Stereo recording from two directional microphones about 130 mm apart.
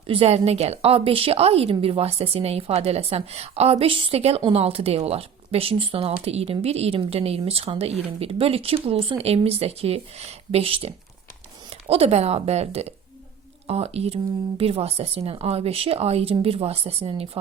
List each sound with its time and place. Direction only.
0.1 s a woman's voice: 45° right (ahead or behind)